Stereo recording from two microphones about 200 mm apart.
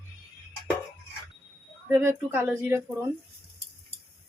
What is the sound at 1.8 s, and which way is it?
Speech, 10° right (ahead or behind).